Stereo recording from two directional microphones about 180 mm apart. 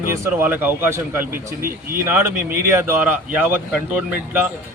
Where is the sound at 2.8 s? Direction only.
10° right (ahead or behind).